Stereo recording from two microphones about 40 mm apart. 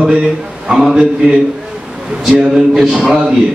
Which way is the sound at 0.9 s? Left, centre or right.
Right.